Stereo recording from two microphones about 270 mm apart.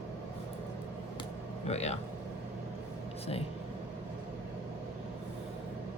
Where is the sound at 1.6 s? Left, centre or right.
Left.